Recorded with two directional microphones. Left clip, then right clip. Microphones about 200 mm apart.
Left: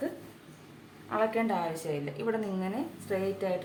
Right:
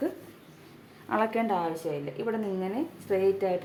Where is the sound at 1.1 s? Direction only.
50° right (ahead or behind).